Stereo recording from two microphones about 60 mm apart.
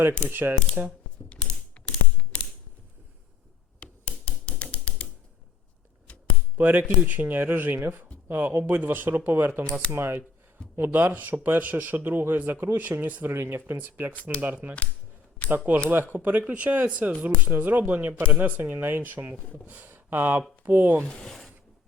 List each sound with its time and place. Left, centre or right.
0.3 s speech: right
1.9 s ratchet: left
3.8 s a sound: left
6.6 s speech: right
21.0 s speech: centre